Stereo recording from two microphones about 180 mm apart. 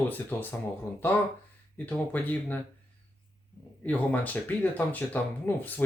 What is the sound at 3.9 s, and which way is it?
Speech, 10° left (ahead or behind).